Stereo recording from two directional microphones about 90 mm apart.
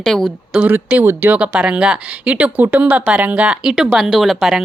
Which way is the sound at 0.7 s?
20° right (ahead or behind).